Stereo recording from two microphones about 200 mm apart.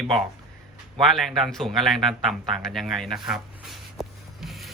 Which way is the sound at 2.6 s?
Centre (ahead or behind).